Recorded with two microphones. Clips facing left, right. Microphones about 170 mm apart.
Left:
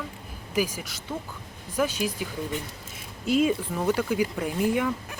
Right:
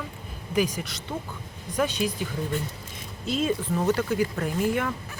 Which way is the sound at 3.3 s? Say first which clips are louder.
Left 3 dB; 10° left (ahead or behind).